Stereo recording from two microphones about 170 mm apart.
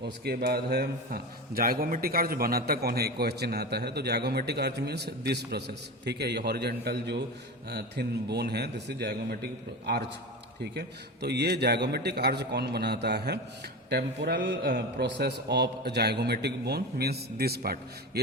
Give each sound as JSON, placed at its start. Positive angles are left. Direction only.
{"t": 0.0, "sound": "a man's voice", "side_deg": -70}